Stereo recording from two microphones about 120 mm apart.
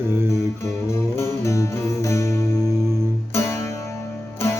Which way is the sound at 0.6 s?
20° left (ahead or behind).